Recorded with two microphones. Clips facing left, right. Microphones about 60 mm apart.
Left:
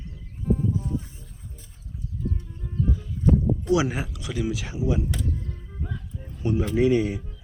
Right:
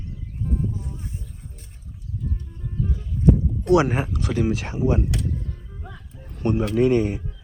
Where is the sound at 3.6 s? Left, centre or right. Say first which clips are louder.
Right 10 dB; right.